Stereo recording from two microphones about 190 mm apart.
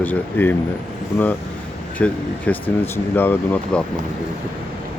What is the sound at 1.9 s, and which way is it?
Speech, 5° left (ahead or behind).